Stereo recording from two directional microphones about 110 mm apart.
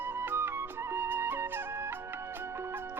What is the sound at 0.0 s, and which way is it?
Music, 20° right (ahead or behind).